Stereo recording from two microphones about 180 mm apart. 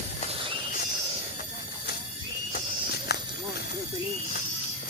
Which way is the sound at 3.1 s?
65° left (ahead or behind).